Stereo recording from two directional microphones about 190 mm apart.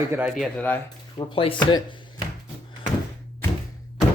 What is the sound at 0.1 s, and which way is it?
Speech, 5° right (ahead or behind).